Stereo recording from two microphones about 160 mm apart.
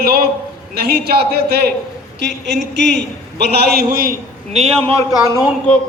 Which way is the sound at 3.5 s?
75° right (ahead or behind).